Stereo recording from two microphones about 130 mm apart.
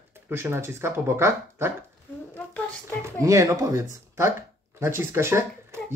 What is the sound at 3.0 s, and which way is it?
Speech, 25° right (ahead or behind).